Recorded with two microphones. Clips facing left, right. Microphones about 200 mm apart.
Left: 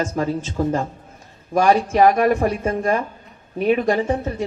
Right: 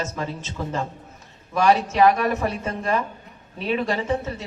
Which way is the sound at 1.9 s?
45° left (ahead or behind).